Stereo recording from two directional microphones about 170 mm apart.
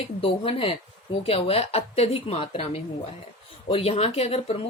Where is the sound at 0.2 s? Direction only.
30° left (ahead or behind).